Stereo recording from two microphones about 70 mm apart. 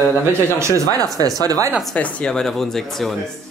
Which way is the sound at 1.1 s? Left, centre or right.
Right.